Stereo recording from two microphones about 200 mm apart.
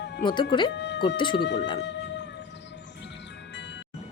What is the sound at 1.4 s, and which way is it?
Speech, 60° left (ahead or behind).